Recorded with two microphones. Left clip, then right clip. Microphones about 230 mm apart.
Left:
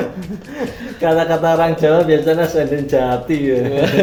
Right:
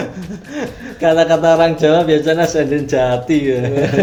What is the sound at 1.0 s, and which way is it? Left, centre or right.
A man's voice, right.